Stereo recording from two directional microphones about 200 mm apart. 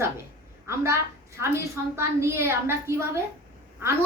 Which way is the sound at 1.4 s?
15° right (ahead or behind).